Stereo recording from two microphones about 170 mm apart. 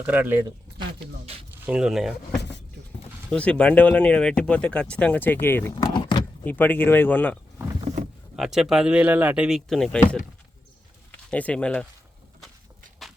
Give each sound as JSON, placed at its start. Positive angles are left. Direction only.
{"t": 0.0, "sound": "speech", "side_deg": -10}
{"t": 0.8, "sound": "a sound", "side_deg": -35}
{"t": 1.6, "sound": "speech", "side_deg": -5}
{"t": 3.2, "sound": "speech", "side_deg": 5}
{"t": 5.7, "sound": "speech", "side_deg": 25}
{"t": 6.4, "sound": "speech", "side_deg": 10}
{"t": 8.4, "sound": "speech", "side_deg": 0}
{"t": 11.3, "sound": "speech", "side_deg": 10}
{"t": 13.0, "sound": "a sound", "side_deg": 0}